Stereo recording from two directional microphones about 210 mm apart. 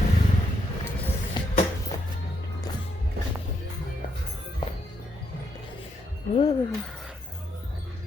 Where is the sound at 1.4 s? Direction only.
20° left (ahead or behind).